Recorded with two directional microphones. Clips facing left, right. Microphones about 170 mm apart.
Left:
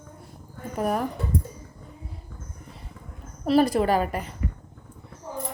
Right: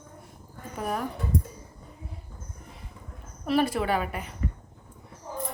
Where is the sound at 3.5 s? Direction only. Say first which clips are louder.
Left 5 dB; 35° left (ahead or behind).